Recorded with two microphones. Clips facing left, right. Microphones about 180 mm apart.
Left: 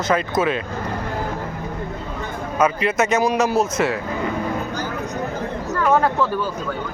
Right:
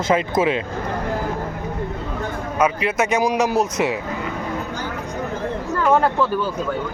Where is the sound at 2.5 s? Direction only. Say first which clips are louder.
Left 1 dB; 10° right (ahead or behind).